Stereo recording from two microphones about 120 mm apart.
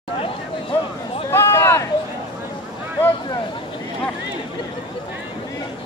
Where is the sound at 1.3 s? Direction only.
20° left (ahead or behind).